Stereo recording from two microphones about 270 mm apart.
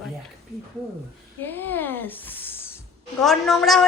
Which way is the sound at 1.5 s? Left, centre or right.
Centre.